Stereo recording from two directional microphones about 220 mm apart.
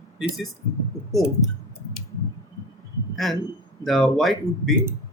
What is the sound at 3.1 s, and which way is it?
Speech, centre (ahead or behind).